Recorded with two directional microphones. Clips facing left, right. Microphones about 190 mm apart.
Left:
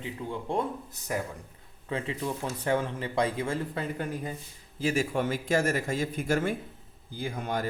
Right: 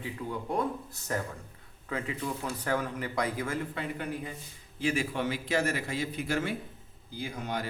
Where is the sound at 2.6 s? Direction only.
25° left (ahead or behind).